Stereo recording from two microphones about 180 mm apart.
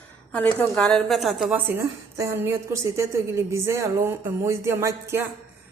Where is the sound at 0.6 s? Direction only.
5° left (ahead or behind).